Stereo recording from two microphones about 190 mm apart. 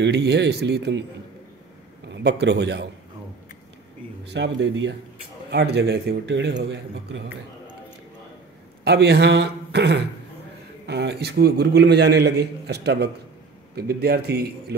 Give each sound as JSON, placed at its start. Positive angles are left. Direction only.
{"t": 0.0, "sound": "a man's voice", "side_deg": -60}
{"t": 2.1, "sound": "a man's voice", "side_deg": -65}
{"t": 4.3, "sound": "speech", "side_deg": -70}
{"t": 8.8, "sound": "a man's voice", "side_deg": -60}